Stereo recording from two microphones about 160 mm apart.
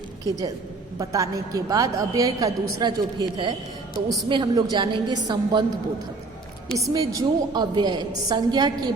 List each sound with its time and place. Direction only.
0.3 s a woman's voice: 20° right (ahead or behind)
6.7 s a woman's voice: 20° right (ahead or behind)